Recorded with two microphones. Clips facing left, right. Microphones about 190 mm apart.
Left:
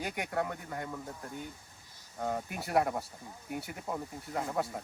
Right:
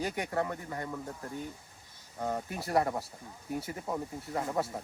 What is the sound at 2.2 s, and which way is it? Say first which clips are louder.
Speech: right 1 dB; centre (ahead or behind).